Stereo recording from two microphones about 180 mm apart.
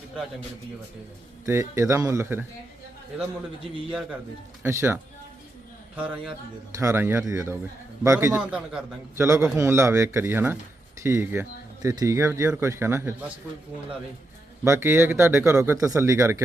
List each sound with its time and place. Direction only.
1.5 s a man's voice: 15° right (ahead or behind)
4.6 s a man's voice: 15° right (ahead or behind)
6.0 s a man's voice: 5° right (ahead or behind)
14.6 s a man's voice: 15° right (ahead or behind)